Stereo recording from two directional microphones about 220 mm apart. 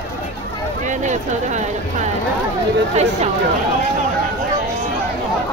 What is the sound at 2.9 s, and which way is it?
Speech, 30° right (ahead or behind).